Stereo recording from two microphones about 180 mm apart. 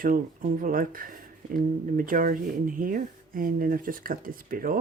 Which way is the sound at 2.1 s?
50° right (ahead or behind).